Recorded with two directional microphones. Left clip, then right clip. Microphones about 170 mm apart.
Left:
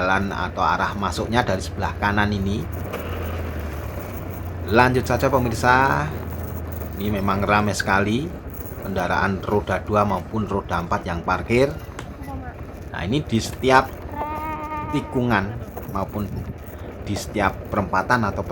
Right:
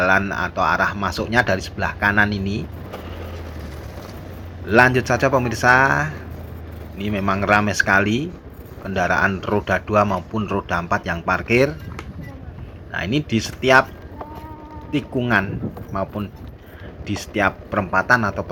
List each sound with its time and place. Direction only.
0.0 s speech: 20° right (ahead or behind)
4.7 s speech: 20° right (ahead or behind)
12.9 s speech: 15° right (ahead or behind)
14.9 s speech: 15° right (ahead or behind)
17.1 s speech: 20° right (ahead or behind)